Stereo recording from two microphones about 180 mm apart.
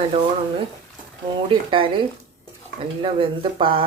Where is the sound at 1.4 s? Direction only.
30° right (ahead or behind).